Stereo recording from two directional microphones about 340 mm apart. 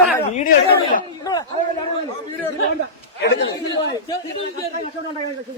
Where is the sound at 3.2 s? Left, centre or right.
Left.